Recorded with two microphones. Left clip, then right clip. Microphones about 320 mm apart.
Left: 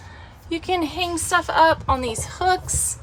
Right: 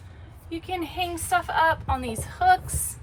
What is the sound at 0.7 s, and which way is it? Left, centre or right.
A woman's voice, centre.